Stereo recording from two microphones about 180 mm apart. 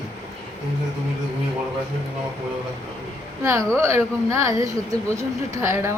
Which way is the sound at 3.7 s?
15° right (ahead or behind).